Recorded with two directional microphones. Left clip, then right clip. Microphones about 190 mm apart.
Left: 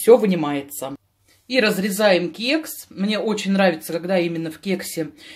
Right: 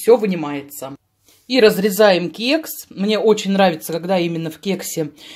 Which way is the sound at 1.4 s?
30° right (ahead or behind).